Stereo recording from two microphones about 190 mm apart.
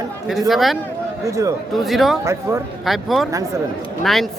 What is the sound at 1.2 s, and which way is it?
Speech, 15° right (ahead or behind).